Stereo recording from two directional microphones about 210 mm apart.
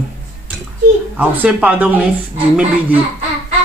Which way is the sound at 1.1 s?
5° right (ahead or behind).